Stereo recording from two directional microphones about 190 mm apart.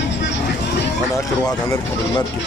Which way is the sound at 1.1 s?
15° left (ahead or behind).